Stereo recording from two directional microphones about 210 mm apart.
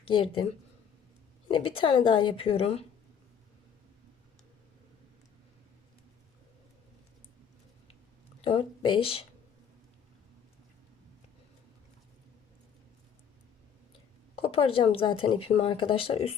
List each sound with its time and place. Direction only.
0.1 s speech: 25° left (ahead or behind)
8.4 s speech: 25° left (ahead or behind)
14.3 s speech: 25° left (ahead or behind)